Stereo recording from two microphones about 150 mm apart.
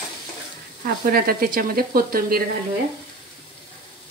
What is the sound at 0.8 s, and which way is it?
Speech, 85° right.